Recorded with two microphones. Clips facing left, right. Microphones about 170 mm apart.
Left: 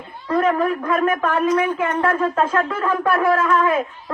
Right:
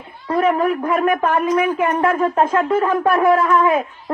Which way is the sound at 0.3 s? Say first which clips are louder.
Right 2 dB; 15° right (ahead or behind).